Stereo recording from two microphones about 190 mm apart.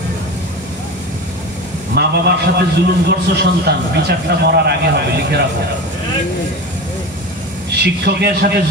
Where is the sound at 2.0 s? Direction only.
60° right (ahead or behind).